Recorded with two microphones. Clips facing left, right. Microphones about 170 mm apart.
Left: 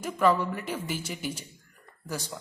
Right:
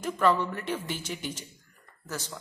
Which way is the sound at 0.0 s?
10° left (ahead or behind).